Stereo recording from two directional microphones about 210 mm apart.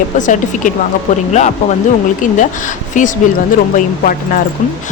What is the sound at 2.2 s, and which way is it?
Speech, 35° left (ahead or behind).